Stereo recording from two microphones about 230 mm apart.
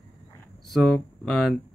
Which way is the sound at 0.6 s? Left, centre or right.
Centre.